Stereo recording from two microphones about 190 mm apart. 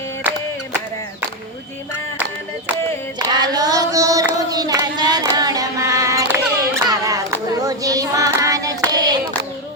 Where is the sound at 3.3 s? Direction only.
20° right (ahead or behind).